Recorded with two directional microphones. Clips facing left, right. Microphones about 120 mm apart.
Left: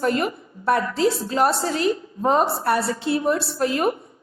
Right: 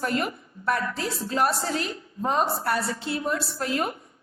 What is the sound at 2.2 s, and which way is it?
A woman's voice, 20° left (ahead or behind).